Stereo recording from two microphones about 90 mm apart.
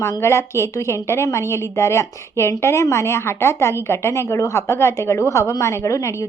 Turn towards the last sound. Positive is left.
turn(degrees=35)  # may be behind; listen again after turning